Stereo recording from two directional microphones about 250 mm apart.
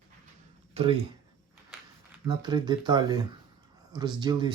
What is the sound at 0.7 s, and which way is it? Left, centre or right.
Speech, right.